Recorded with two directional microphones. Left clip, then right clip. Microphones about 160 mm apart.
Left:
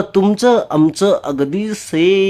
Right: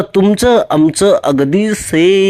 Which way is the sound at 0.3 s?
20° right (ahead or behind).